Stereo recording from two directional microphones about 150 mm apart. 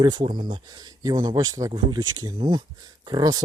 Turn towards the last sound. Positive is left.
turn(degrees=-25)  # may be behind; listen again after turning